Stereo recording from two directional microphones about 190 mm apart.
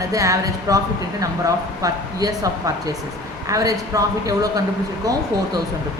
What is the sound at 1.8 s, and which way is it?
Speech, 20° right (ahead or behind).